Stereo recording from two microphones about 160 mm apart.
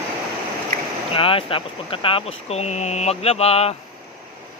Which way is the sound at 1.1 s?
35° left (ahead or behind).